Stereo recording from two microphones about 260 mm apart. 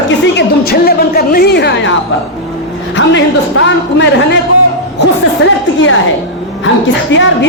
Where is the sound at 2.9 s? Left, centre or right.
Left.